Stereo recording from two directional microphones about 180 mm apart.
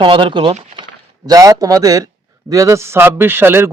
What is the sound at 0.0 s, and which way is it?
A man's voice, 30° right (ahead or behind).